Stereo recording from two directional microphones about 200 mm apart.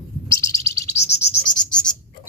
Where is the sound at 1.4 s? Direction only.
5° left (ahead or behind).